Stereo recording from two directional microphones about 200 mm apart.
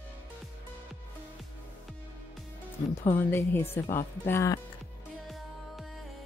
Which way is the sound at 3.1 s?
10° left (ahead or behind).